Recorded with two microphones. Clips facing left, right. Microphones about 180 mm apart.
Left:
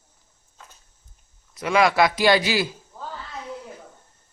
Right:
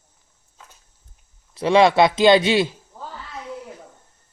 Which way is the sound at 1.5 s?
30° right (ahead or behind).